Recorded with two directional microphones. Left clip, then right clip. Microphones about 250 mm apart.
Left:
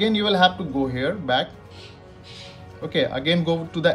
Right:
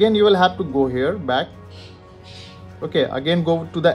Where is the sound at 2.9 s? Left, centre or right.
Centre.